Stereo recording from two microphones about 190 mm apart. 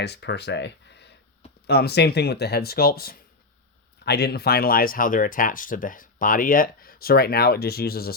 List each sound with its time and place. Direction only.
0.0 s speech: 65° left (ahead or behind)